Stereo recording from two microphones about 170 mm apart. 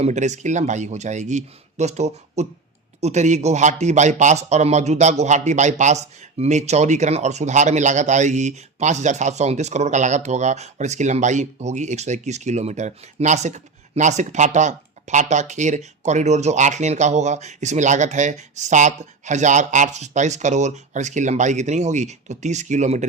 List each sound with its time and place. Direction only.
0.0 s speech: 45° right (ahead or behind)